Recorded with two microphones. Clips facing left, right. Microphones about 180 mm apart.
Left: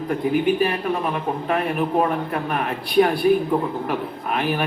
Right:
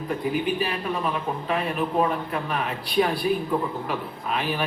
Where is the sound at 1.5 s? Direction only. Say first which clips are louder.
Left 4 dB; 55° left (ahead or behind).